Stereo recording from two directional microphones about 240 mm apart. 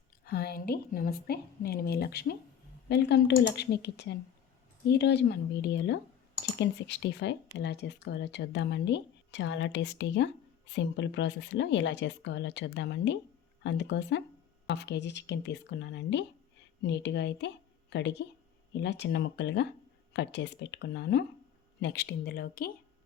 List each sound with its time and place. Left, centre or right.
0.3 s a woman's voice: left